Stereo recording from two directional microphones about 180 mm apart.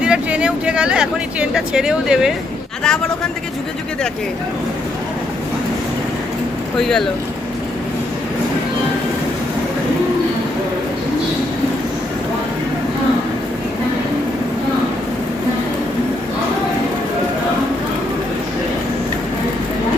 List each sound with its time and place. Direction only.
0.0 s speech: 5° right (ahead or behind)
6.7 s speech: centre (ahead or behind)